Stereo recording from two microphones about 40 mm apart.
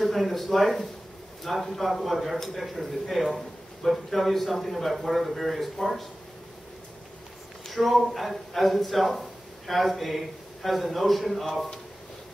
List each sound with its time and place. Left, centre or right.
0.0 s speech: centre
7.6 s speech: centre